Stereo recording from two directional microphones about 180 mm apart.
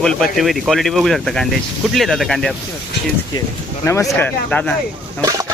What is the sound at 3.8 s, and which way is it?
Speech, 15° left (ahead or behind).